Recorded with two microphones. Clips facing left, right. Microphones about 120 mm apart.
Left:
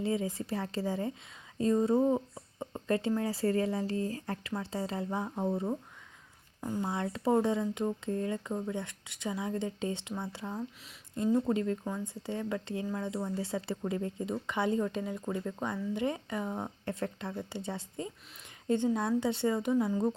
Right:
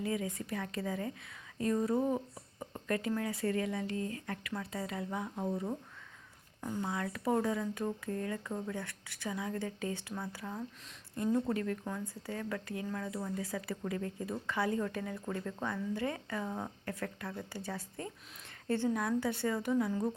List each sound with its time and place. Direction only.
0.0 s speech: 25° left (ahead or behind)